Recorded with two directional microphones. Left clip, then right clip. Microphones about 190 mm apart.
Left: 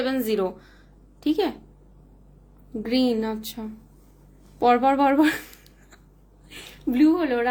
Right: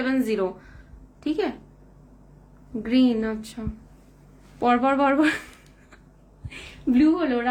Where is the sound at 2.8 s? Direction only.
10° left (ahead or behind).